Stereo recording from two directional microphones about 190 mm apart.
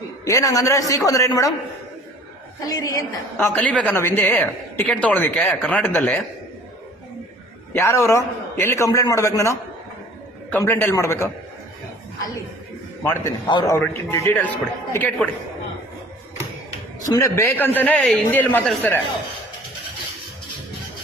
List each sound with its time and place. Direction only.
0.3 s a woman's voice: 15° left (ahead or behind)
2.6 s a woman's voice: 20° left (ahead or behind)
7.7 s a woman's voice: 15° left (ahead or behind)
13.0 s a woman's voice: 15° left (ahead or behind)
17.1 s a woman's voice: 15° left (ahead or behind)